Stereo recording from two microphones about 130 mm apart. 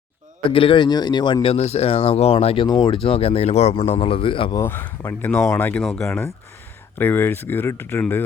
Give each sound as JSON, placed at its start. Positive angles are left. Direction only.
{"t": 0.5, "sound": "speech", "side_deg": 40}
{"t": 2.6, "sound": "speech", "side_deg": 35}
{"t": 4.5, "sound": "speech", "side_deg": 15}